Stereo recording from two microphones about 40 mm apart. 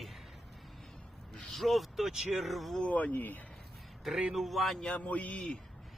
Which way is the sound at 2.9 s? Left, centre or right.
Left.